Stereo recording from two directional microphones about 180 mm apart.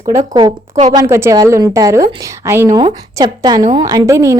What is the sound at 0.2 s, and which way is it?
A woman's voice, 25° right (ahead or behind).